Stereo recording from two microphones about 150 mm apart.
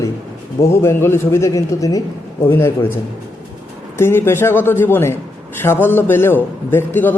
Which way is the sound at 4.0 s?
15° left (ahead or behind).